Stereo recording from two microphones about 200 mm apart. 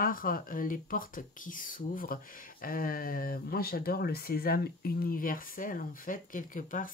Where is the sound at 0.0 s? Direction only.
45° left (ahead or behind).